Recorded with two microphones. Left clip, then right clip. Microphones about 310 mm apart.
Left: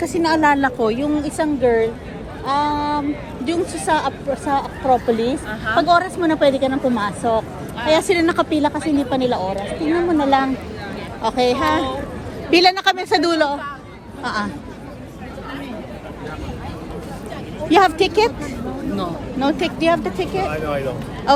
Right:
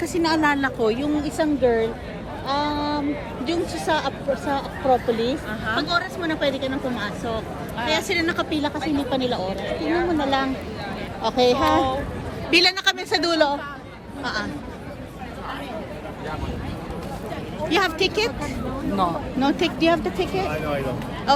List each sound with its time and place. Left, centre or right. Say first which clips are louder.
0.0 s a woman's voice: left 4 dB; centre
2.5 s a sound: left 5 dB; centre
3.4 s a woman's voice: left 4 dB; centre
5.9 s a woman's voice: left 8 dB; centre; by 11.6 s left
12.5 s a woman's voice: left 4 dB; centre
17.7 s a woman's voice: left 7 dB; centre
19.4 s a woman's voice: left 2 dB; centre